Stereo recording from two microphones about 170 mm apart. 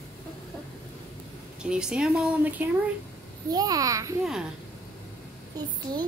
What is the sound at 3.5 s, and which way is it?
Speech, 20° right (ahead or behind).